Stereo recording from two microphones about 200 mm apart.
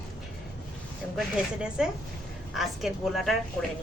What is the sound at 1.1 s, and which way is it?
A woman's voice, 5° right (ahead or behind).